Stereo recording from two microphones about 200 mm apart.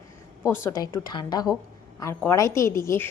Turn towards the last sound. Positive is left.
turn(degrees=15)  # may be behind; listen again after turning